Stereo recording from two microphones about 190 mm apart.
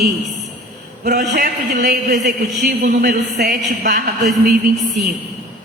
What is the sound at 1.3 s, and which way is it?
A man's voice, 45° right (ahead or behind).